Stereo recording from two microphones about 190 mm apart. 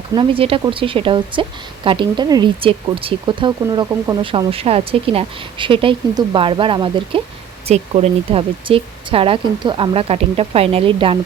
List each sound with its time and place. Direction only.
0.1 s speech: 25° right (ahead or behind)